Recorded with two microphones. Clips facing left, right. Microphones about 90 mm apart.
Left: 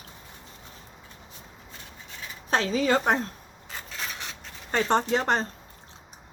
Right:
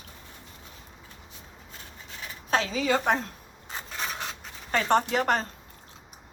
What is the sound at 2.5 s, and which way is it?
Speech, 40° left (ahead or behind).